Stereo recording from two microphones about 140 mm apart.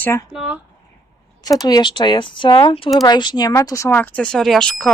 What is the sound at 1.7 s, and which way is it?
Speech, 30° left (ahead or behind).